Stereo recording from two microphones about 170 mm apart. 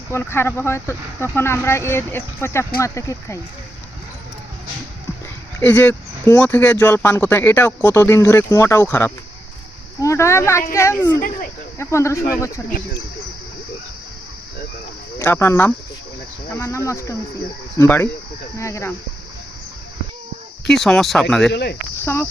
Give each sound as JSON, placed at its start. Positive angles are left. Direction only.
{"t": 0.1, "sound": "speech", "side_deg": 15}
{"t": 5.5, "sound": "speech", "side_deg": 10}
{"t": 15.2, "sound": "speech", "side_deg": 15}
{"t": 20.7, "sound": "speech", "side_deg": 0}
{"t": 21.5, "sound": "speech", "side_deg": 75}
{"t": 22.0, "sound": "speech", "side_deg": 15}